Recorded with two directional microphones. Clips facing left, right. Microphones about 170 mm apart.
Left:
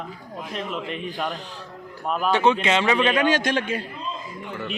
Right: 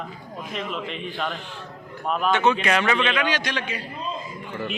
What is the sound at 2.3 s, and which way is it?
Speech, 35° left (ahead or behind).